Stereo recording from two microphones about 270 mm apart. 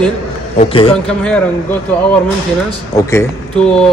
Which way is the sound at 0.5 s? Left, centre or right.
Centre.